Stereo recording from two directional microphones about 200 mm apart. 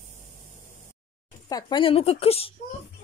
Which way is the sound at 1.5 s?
25° left (ahead or behind).